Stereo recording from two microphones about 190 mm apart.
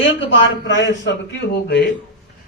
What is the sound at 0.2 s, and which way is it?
Speech, 70° left (ahead or behind).